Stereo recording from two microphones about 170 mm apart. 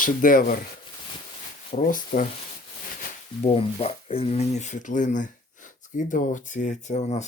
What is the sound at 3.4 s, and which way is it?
Speech, 35° left (ahead or behind).